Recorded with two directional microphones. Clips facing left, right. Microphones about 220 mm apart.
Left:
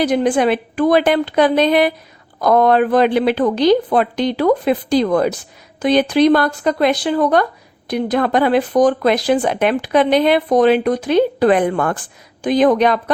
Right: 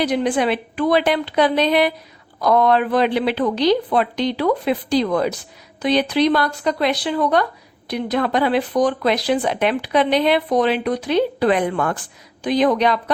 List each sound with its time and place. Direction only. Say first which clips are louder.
0.0 s speech: left 4 dB; 45° left (ahead or behind)